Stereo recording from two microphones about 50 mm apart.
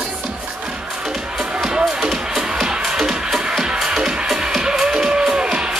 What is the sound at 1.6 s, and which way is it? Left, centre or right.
Music, centre.